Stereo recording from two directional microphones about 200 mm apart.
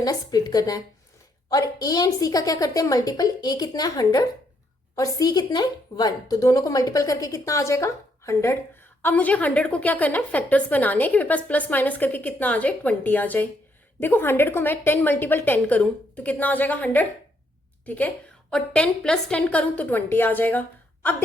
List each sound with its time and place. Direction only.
0.0 s a woman's voice: 20° left (ahead or behind)